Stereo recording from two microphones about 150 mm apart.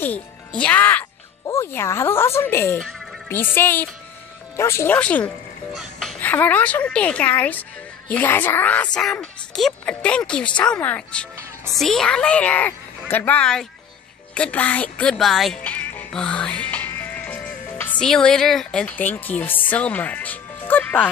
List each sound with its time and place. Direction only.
0.0 s speech: 10° left (ahead or behind)
5.7 s music: centre (ahead or behind)
6.3 s speech: 10° left (ahead or behind)